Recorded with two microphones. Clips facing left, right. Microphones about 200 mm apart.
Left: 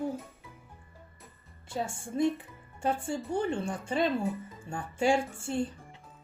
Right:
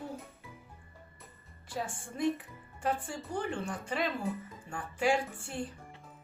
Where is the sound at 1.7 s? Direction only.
25° left (ahead or behind).